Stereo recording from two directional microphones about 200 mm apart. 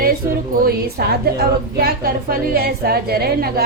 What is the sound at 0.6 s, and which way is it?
A woman's voice, 50° right (ahead or behind).